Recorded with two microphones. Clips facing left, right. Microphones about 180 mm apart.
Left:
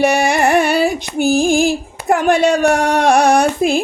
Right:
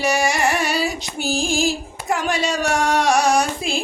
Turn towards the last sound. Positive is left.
turn(degrees=55)  # may be behind; listen again after turning